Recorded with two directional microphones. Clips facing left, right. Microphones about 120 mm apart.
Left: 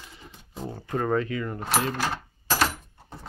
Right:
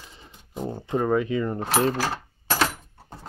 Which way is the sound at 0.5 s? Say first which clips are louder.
Right 4 dB; 20° right (ahead or behind).